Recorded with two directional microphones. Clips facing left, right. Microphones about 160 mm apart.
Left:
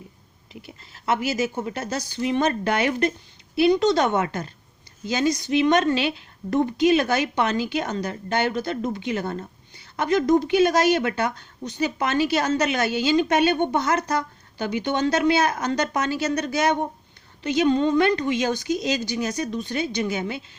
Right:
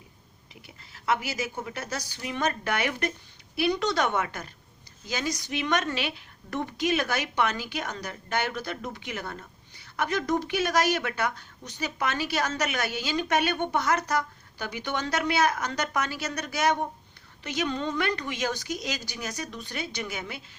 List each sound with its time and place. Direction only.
1.5 s speech: 30° left (ahead or behind)